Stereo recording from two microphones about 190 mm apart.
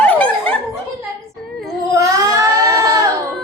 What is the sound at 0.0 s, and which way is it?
Laughter, 5° left (ahead or behind).